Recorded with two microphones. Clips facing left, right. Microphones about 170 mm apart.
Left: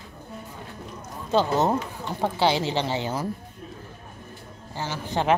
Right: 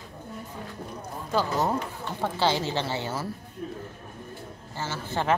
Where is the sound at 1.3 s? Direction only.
25° left (ahead or behind).